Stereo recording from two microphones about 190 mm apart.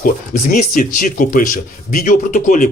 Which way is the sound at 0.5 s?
45° left (ahead or behind).